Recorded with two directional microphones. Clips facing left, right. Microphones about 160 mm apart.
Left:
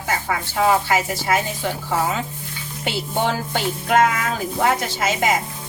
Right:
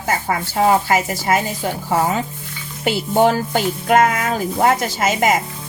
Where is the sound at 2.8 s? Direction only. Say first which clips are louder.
Right 7 dB; 45° right (ahead or behind).